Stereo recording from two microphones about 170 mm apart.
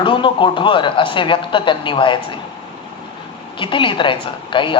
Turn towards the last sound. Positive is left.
turn(degrees=30)  # may be behind; listen again after turning